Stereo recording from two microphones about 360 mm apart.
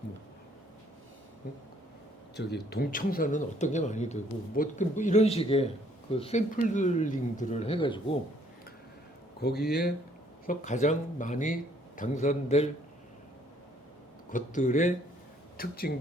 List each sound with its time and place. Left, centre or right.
2.3 s speech: left
9.4 s speech: left
14.3 s speech: left